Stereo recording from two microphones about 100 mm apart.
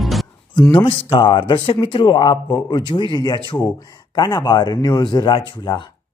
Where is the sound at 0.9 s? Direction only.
65° left (ahead or behind).